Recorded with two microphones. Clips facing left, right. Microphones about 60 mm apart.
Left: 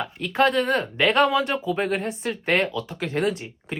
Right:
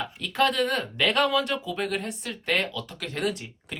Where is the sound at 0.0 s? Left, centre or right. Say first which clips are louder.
Left 4 dB; left.